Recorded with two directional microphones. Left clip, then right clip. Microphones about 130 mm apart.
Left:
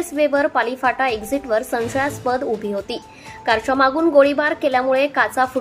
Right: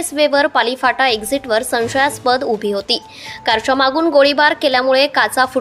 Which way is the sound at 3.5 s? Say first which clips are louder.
Right 3 dB; 40° right (ahead or behind).